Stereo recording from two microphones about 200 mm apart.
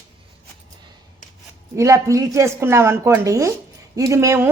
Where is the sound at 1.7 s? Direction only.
15° right (ahead or behind).